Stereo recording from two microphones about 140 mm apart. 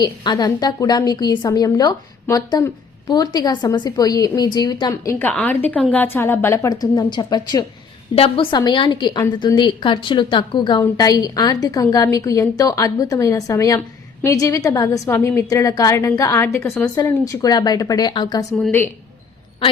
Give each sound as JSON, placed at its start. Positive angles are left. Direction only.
{"t": 0.0, "sound": "a woman's voice", "side_deg": 30}
{"t": 5.3, "sound": "a woman's voice", "side_deg": 10}
{"t": 8.1, "sound": "a woman's voice", "side_deg": 40}